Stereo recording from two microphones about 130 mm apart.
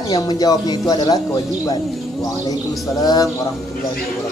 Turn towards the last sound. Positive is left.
turn(degrees=30)  # may be behind; listen again after turning